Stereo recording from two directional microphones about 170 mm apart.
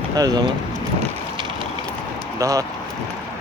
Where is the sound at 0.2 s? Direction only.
20° right (ahead or behind).